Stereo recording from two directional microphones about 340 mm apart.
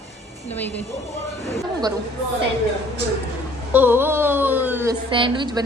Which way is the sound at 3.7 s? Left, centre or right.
Centre.